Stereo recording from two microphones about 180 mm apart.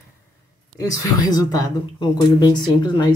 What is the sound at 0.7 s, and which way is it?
Speech, 20° left (ahead or behind).